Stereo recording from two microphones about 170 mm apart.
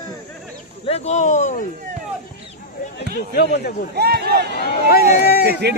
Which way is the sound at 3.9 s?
70° right (ahead or behind).